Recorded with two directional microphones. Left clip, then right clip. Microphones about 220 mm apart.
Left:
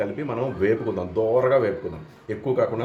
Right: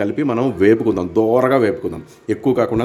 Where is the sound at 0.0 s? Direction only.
50° right (ahead or behind).